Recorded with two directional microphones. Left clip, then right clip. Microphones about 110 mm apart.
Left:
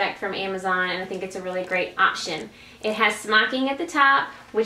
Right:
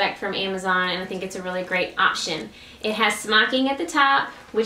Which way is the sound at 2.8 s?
15° right (ahead or behind).